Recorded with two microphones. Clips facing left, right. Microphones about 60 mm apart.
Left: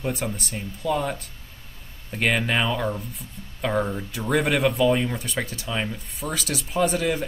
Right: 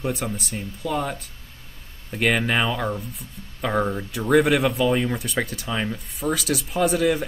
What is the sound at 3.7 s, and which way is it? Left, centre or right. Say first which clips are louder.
Speech: right 2 dB; centre.